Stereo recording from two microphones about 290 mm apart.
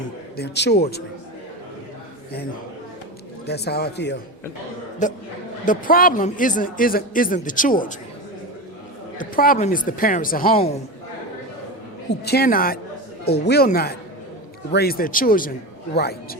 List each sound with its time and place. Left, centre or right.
0.3 s speech: left
3.4 s speech: left
5.0 s speech: left
9.1 s speech: left
12.2 s speech: left